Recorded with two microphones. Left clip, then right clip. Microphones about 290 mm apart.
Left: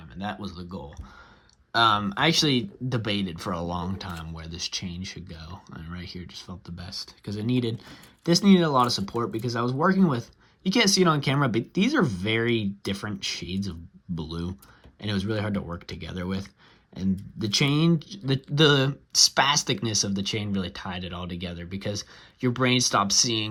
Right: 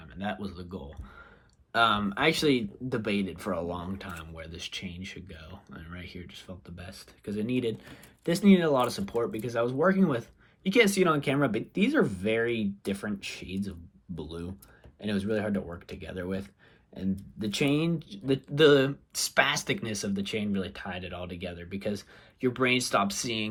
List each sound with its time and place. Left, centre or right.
0.2 s speech: centre